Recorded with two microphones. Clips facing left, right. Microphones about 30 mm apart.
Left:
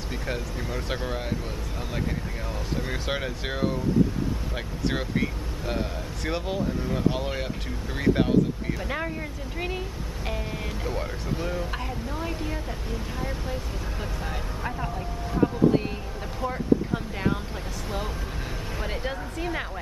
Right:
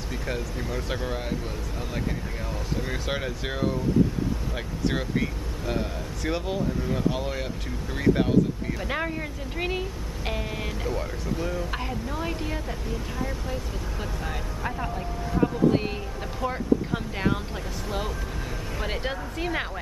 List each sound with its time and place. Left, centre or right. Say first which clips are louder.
0.3 s speech: right 1 dB; centre
2.9 s speech: even; centre
5.7 s speech: right 1 dB; centre
8.8 s speech: right 4 dB; centre
10.9 s speech: even; centre
11.7 s speech: right 1 dB; centre
18.8 s speech: right 2 dB; centre